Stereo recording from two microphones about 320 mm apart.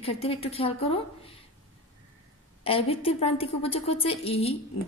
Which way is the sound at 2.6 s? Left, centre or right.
Centre.